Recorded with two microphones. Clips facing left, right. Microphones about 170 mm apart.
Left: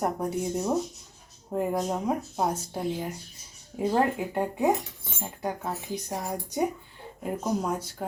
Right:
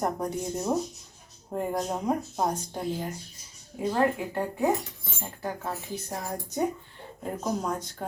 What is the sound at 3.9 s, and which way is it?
Speech, 15° left (ahead or behind).